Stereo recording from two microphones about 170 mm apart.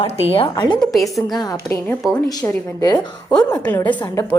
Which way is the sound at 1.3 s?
20° left (ahead or behind).